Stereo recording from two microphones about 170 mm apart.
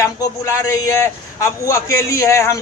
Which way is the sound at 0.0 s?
20° left (ahead or behind).